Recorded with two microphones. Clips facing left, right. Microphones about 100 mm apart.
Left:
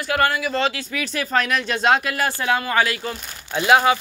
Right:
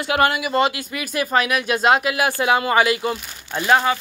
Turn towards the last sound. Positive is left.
turn(degrees=10)  # may be behind; listen again after turning